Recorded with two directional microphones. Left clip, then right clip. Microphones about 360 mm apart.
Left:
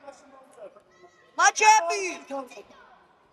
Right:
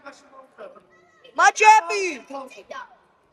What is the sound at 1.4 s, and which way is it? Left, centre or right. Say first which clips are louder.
Speech: right 4 dB; centre.